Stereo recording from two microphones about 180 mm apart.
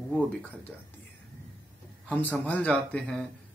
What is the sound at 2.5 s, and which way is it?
Speech, 10° left (ahead or behind).